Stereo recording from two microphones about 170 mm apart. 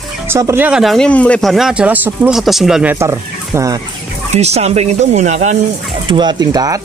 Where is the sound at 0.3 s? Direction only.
15° right (ahead or behind).